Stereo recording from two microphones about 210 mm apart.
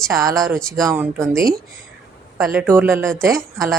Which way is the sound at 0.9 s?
15° right (ahead or behind).